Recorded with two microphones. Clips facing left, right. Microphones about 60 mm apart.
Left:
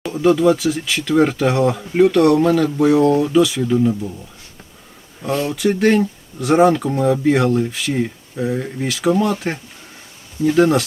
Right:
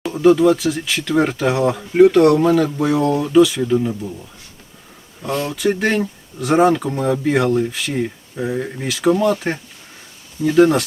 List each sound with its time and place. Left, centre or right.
0.0 s a sound: centre
0.4 s speech: centre
5.3 s speech: left
5.5 s speech: centre
10.6 s speech: centre